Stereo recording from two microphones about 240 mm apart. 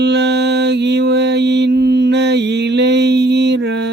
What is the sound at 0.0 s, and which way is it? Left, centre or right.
Mantra, right.